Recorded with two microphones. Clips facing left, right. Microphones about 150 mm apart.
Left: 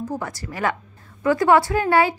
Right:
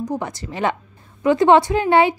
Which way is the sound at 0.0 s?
20° right (ahead or behind).